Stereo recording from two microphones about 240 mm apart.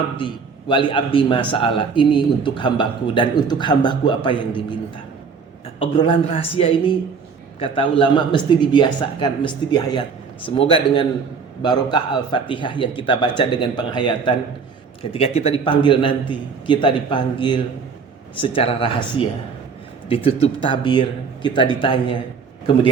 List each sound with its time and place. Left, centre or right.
0.2 s a man's voice: centre
5.8 s a man's voice: left
20.1 s a man's voice: left